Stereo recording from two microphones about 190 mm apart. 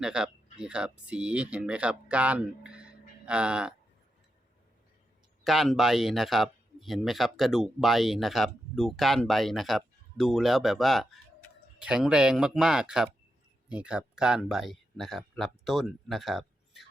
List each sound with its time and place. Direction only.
0.0 s speech: 5° right (ahead or behind)
5.4 s speech: centre (ahead or behind)